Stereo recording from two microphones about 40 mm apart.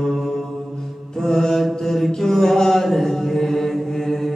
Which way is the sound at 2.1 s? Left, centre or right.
Centre.